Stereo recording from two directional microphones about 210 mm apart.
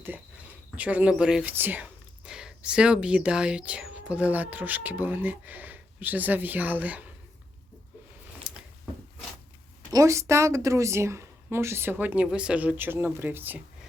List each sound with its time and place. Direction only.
0.8 s speech: 5° right (ahead or behind)
8.5 s a sound: 5° right (ahead or behind)
9.9 s speech: 15° right (ahead or behind)